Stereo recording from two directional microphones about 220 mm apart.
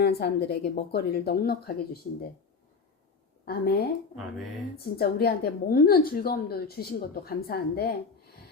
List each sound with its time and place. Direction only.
0.0 s a woman's voice: 45° left (ahead or behind)
3.4 s a woman's voice: 45° left (ahead or behind)